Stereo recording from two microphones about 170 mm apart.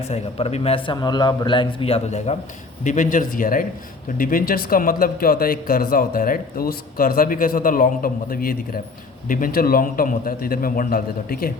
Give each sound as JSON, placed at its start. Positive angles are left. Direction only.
{"t": 0.1, "sound": "a man's voice", "side_deg": 35}